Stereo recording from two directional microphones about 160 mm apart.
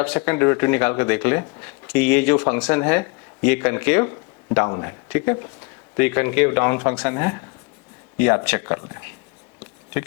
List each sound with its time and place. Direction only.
0.0 s speech: 10° left (ahead or behind)